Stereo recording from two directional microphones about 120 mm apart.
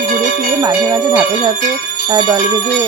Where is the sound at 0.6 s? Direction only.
30° right (ahead or behind).